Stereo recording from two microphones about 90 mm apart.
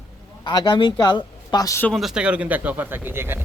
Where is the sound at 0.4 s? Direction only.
55° left (ahead or behind).